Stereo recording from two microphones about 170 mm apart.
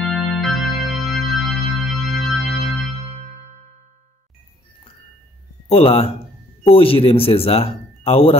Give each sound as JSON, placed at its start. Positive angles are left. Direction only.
{"t": 0.0, "sound": "music", "side_deg": 0}
{"t": 5.7, "sound": "speech", "side_deg": 35}